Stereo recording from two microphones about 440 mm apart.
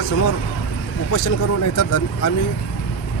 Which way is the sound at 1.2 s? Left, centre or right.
Left.